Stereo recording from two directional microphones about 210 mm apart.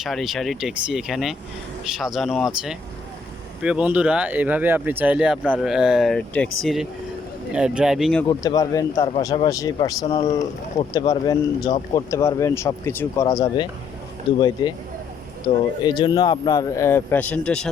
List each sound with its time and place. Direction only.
0.0 s speech: centre (ahead or behind)
8.3 s a man's voice: 20° left (ahead or behind)
15.8 s a man's voice: 20° left (ahead or behind); by 17.7 s 5° left (ahead or behind)